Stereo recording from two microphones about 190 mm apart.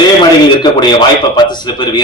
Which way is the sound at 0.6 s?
25° left (ahead or behind).